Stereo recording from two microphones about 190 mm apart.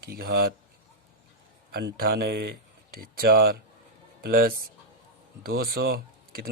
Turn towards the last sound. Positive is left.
turn(degrees=-55)  # may be behind; listen again after turning